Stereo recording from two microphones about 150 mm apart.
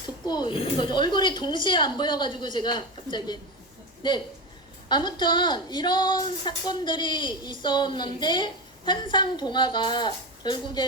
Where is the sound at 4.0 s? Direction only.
30° left (ahead or behind).